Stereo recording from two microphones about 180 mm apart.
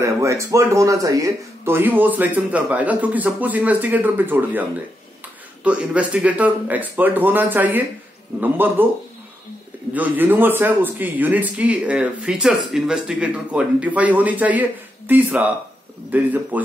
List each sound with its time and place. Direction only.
0.0 s speech: 15° right (ahead or behind)
9.9 s speech: 10° right (ahead or behind)